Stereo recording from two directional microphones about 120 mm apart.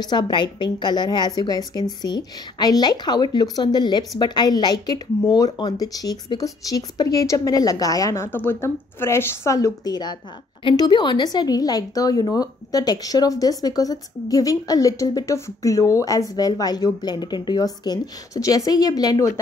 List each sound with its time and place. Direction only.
0.0 s a woman's voice: 35° left (ahead or behind)